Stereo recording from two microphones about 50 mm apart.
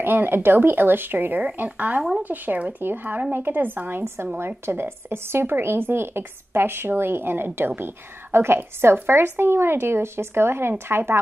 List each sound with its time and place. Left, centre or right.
0.0 s speech: right
4.4 s speech: right